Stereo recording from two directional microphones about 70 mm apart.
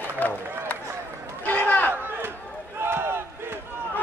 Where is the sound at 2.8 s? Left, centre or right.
Right.